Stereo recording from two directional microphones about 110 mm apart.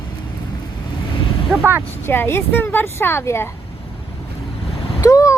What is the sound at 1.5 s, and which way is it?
Speech, 20° right (ahead or behind).